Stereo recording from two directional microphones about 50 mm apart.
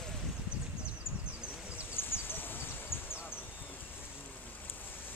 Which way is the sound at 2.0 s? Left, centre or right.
Left.